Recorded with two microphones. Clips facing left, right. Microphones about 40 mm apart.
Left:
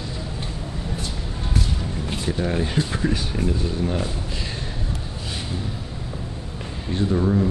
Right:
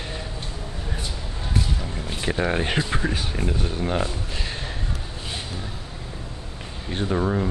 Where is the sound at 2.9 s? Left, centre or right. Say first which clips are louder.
Left 2 dB; centre.